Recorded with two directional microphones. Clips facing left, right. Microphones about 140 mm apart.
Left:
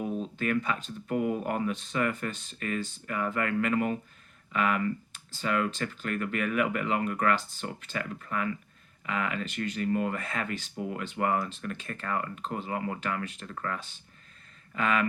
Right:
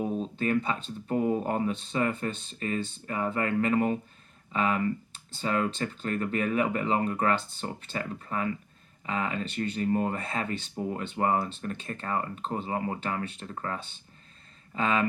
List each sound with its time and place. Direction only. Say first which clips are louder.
0.0 s speech: right 2 dB; 35° right (ahead or behind)